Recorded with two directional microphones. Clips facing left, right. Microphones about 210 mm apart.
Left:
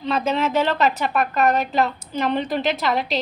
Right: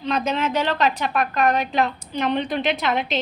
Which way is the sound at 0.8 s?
5° left (ahead or behind).